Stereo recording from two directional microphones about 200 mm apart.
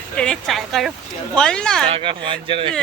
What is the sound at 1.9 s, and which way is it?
Speech, 25° right (ahead or behind).